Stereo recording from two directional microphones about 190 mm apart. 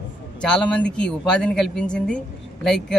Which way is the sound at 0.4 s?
5° left (ahead or behind).